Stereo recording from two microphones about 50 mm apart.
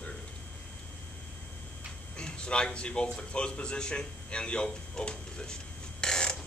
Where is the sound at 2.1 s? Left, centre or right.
Centre.